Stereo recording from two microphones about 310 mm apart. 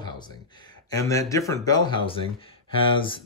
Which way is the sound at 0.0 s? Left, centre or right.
Centre.